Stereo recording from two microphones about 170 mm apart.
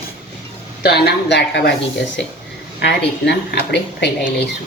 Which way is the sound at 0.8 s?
70° left (ahead or behind).